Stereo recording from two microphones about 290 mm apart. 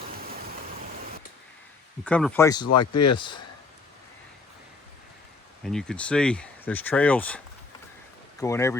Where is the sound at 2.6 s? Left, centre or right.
Left.